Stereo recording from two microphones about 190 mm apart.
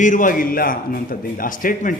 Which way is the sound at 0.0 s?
45° left (ahead or behind).